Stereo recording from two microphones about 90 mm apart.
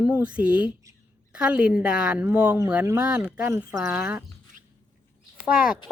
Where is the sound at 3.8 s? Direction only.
15° right (ahead or behind).